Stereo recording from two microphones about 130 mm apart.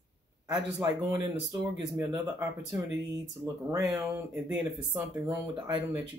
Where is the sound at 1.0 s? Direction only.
20° right (ahead or behind).